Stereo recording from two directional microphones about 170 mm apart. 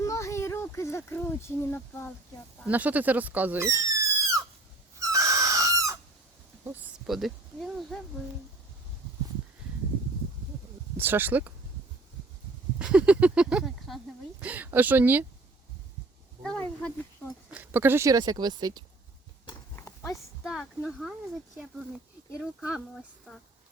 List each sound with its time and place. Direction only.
0.0 s a sound: 20° left (ahead or behind)
2.6 s speech: 10° right (ahead or behind)
4.9 s owl: 20° right (ahead or behind)
6.7 s a sound: 5° right (ahead or behind)
10.9 s speech: 10° right (ahead or behind)
12.8 s speech: 5° right (ahead or behind)
16.4 s speech: 5° left (ahead or behind)
17.5 s speech: 10° right (ahead or behind)
19.7 s horse: 15° left (ahead or behind)
20.4 s speech: centre (ahead or behind)